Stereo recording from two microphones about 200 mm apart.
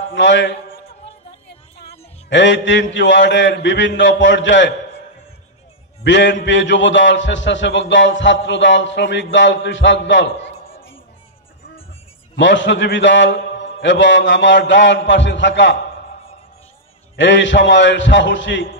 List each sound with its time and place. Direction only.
0.1 s a man's voice: 65° left (ahead or behind)
1.8 s a man's voice: 60° left (ahead or behind)
6.0 s a man's voice: 65° left (ahead or behind)
12.4 s a man's voice: 65° left (ahead or behind)
17.2 s a man's voice: 65° left (ahead or behind)